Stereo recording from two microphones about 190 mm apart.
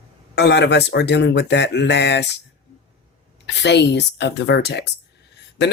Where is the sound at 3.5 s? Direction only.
65° left (ahead or behind).